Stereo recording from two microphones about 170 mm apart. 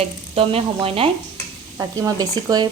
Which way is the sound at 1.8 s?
20° right (ahead or behind).